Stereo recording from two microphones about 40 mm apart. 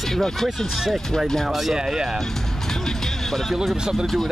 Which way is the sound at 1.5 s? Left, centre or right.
Centre.